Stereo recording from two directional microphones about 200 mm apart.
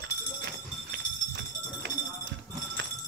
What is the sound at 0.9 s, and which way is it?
Clip-clop, 60° right (ahead or behind).